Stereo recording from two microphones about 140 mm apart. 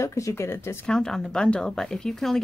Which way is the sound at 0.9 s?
5° left (ahead or behind).